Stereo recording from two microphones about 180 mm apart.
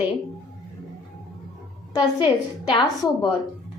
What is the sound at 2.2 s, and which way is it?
A woman's voice, 25° left (ahead or behind).